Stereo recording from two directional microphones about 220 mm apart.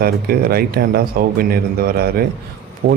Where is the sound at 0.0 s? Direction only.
45° right (ahead or behind).